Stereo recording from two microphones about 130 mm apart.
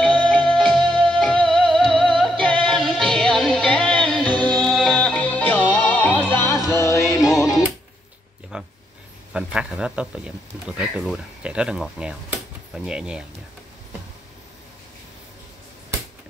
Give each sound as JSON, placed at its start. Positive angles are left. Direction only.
{"t": 0.0, "sound": "music", "side_deg": 5}
{"t": 7.2, "sound": "music", "side_deg": 0}
{"t": 8.5, "sound": "a sound", "side_deg": -5}
{"t": 9.3, "sound": "a man's voice", "side_deg": -5}